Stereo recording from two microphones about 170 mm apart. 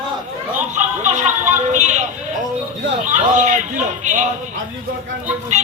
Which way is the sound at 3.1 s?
45° right (ahead or behind).